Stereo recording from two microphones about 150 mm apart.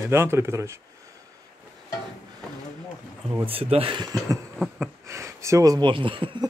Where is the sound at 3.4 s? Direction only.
40° right (ahead or behind).